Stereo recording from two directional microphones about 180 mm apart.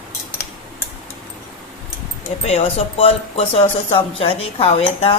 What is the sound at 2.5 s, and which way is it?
Speech, 35° left (ahead or behind).